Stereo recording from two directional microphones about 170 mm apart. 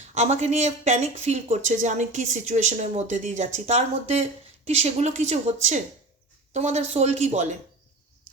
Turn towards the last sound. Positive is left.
turn(degrees=-40)  # may be behind; listen again after turning